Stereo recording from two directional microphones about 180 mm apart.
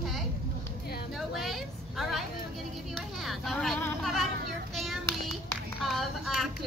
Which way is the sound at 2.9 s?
Centre (ahead or behind).